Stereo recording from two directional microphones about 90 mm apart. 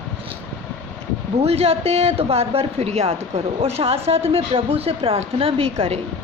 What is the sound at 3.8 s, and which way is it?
A woman's voice, 90° right.